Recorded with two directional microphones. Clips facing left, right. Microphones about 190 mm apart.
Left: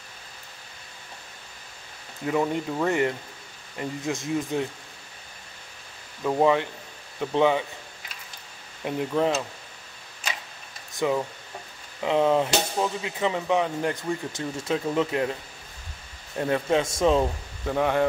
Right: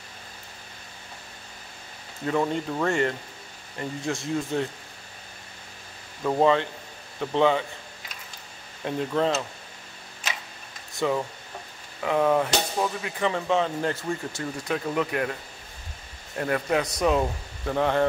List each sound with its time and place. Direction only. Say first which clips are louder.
2.2 s speech: even; 15° left (ahead or behind)
6.4 s speech: even; 15° left (ahead or behind)
8.8 s speech: left 1 dB; 15° left (ahead or behind)
11.0 s speech: left 1 dB; 15° left (ahead or behind)
16.3 s speech: left 2 dB; 20° left (ahead or behind)
17.2 s speech: left 1 dB; 10° left (ahead or behind)